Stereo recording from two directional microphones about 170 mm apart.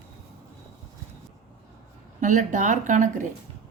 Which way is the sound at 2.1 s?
45° right (ahead or behind).